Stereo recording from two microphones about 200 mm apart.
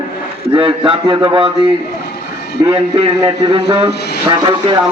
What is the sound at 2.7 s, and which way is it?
Speech, 30° right (ahead or behind).